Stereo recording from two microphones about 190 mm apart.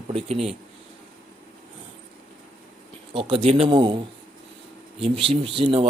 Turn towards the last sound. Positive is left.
turn(degrees=-30)  # may be behind; listen again after turning